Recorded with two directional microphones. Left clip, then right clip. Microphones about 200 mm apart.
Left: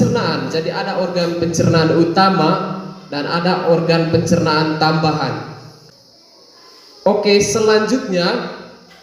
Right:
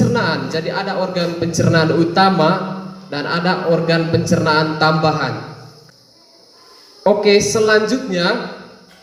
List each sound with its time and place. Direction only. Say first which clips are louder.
0.0 s a man's voice: even; 35° right (ahead or behind)
7.0 s a man's voice: right 1 dB; 35° right (ahead or behind)